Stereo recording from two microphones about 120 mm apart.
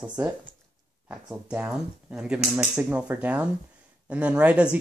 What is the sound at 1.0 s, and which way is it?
Speech, 20° right (ahead or behind).